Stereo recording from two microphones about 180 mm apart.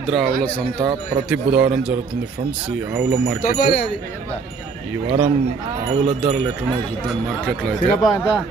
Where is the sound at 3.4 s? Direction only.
55° left (ahead or behind).